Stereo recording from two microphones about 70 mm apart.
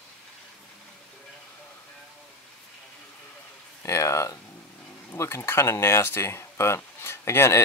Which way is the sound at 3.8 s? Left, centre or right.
Left.